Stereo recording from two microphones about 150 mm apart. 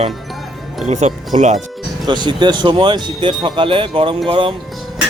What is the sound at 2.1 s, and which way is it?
Speech, 30° right (ahead or behind).